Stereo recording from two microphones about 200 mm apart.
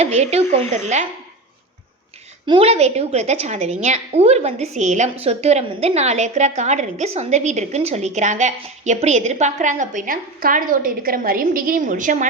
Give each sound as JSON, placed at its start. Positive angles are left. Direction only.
{"t": 0.0, "sound": "a woman's voice", "side_deg": -35}
{"t": 2.5, "sound": "a woman's voice", "side_deg": -30}